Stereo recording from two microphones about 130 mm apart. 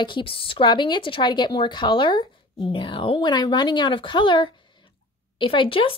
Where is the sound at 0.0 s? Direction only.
40° left (ahead or behind).